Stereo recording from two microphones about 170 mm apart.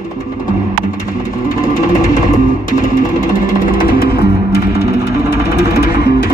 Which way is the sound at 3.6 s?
60° left (ahead or behind).